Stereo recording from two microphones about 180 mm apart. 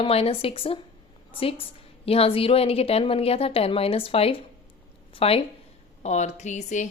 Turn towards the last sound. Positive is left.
turn(degrees=40)  # may be behind; listen again after turning